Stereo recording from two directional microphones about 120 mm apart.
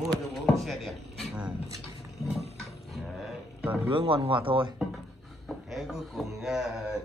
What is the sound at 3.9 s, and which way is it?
Speech, 50° right (ahead or behind).